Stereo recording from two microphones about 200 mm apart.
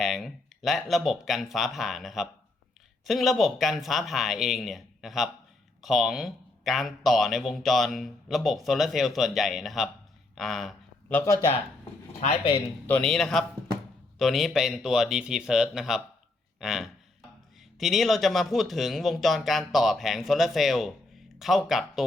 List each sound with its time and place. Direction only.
0.0 s speech: centre (ahead or behind)
10.3 s a sound: centre (ahead or behind)
11.2 s speech: 15° left (ahead or behind)
12.9 s speech: 5° left (ahead or behind)